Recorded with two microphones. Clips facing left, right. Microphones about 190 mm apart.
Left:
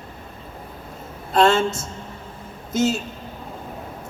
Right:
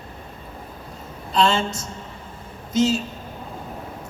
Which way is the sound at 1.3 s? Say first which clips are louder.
Left 3 dB; 50° left (ahead or behind).